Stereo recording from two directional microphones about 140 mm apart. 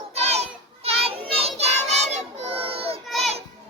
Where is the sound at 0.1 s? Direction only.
50° right (ahead or behind).